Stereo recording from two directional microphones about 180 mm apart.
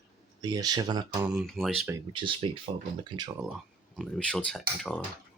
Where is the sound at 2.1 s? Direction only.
30° right (ahead or behind).